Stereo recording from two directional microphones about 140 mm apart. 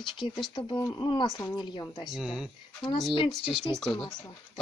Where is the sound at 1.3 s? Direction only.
20° left (ahead or behind).